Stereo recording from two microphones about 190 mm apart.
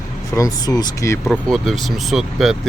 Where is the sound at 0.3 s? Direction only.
20° left (ahead or behind).